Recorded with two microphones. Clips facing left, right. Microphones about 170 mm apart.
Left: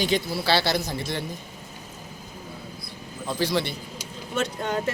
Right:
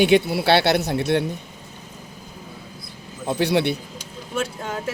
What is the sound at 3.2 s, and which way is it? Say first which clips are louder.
Speech: right 5 dB; 65° right (ahead or behind).